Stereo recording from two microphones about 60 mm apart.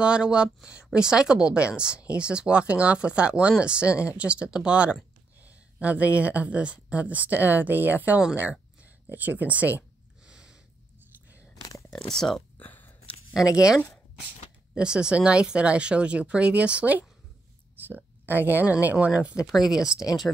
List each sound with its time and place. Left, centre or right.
0.0 s speech: centre
10.2 s a sound: centre
11.9 s speech: centre
12.5 s a sound: left
14.7 s speech: centre
19.4 s speech: centre